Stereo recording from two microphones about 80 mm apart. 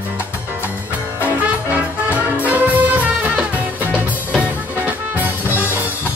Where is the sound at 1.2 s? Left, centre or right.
Right.